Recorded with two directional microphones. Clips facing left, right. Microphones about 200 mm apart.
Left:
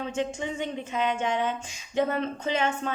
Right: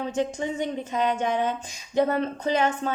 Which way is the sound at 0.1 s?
40° right (ahead or behind).